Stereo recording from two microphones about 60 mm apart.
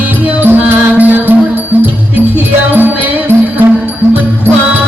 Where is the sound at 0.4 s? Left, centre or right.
Right.